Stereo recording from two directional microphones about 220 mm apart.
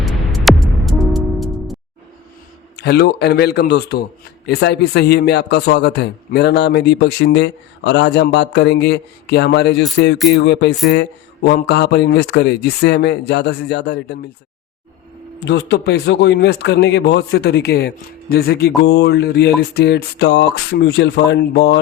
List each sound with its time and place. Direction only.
0.0 s music: centre (ahead or behind)
2.7 s speech: 50° left (ahead or behind)
15.4 s speech: 50° left (ahead or behind)